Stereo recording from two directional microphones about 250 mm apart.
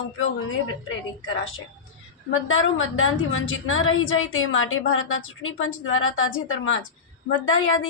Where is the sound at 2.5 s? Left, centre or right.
Left.